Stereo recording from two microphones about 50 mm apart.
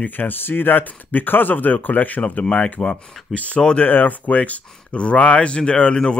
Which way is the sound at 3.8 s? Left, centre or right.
Left.